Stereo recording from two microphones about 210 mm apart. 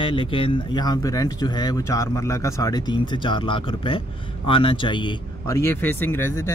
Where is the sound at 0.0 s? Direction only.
25° left (ahead or behind).